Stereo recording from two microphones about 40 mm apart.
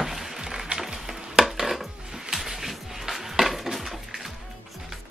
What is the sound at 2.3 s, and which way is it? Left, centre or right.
Music, centre.